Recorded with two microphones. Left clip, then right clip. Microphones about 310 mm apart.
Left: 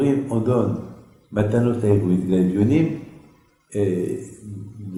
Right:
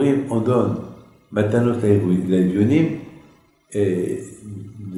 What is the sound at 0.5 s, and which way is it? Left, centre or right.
Speech, centre.